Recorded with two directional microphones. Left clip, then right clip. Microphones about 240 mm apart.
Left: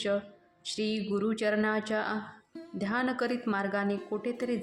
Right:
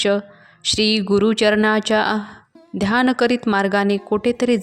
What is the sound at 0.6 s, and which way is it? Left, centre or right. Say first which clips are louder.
A woman's voice: right 15 dB; right.